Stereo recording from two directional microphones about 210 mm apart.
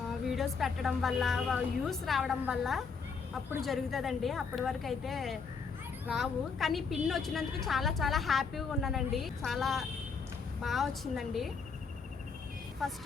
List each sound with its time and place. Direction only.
0.3 s a woman's voice: centre (ahead or behind)
12.8 s a woman's voice: centre (ahead or behind)